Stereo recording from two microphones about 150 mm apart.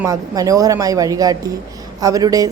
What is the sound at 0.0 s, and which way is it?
A woman's voice, 25° right (ahead or behind).